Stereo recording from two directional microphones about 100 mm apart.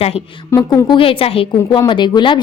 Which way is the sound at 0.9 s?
65° left (ahead or behind).